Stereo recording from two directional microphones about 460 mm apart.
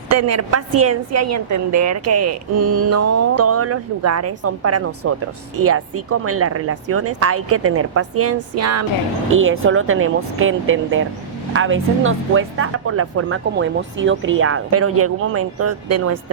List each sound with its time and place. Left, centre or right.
0.1 s a woman's voice: right